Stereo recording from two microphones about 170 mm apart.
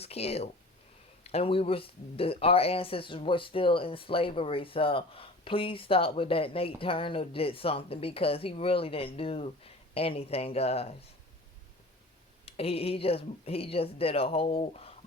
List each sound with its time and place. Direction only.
0.0 s speech: 35° left (ahead or behind)
12.5 s speech: 35° left (ahead or behind)